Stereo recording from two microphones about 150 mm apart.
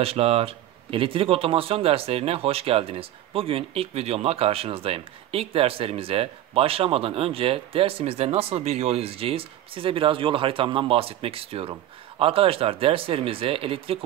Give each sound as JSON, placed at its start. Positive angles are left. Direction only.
{"t": 0.0, "sound": "speech", "side_deg": -40}